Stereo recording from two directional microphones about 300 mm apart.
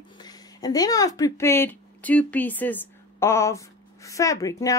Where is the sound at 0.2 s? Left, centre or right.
Centre.